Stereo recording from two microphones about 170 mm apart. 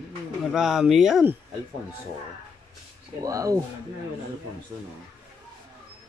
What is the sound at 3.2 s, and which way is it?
Speech, 20° right (ahead or behind).